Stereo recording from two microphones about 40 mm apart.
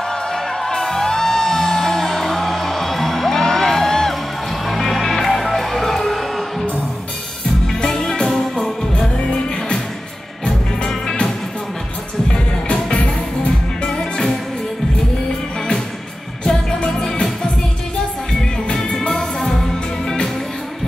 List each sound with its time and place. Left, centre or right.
0.1 s music: centre
4.6 s music: centre
7.9 s music: centre
10.9 s music: centre
12.3 s music: left
13.8 s music: centre
17.0 s music: centre
18.7 s music: centre